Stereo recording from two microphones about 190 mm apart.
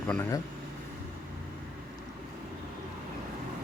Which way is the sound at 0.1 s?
10° left (ahead or behind).